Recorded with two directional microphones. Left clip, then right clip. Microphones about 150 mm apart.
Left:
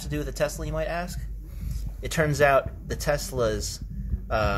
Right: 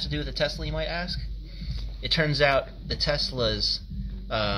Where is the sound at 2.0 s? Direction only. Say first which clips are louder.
Left 1 dB; 25° left (ahead or behind).